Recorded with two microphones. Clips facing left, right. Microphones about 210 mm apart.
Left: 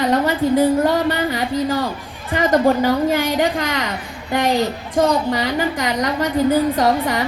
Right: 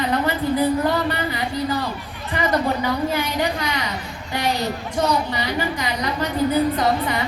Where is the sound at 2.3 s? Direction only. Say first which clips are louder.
Left 6 dB; 45° left (ahead or behind).